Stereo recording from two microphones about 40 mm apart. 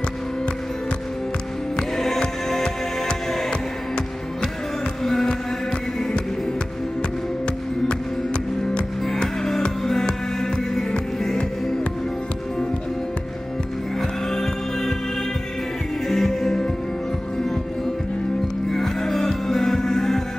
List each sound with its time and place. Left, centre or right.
1.8 s music: centre
2.6 s music: left
5.0 s music: centre
9.8 s music: centre
14.3 s music: centre
16.1 s music: centre
18.7 s music: centre